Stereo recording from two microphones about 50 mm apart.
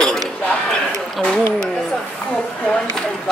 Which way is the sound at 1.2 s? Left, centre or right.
Centre.